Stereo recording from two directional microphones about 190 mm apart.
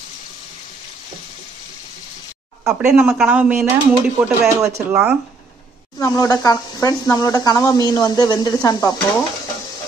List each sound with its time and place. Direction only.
2.6 s speech: 5° right (ahead or behind)
5.9 s speech: 20° left (ahead or behind)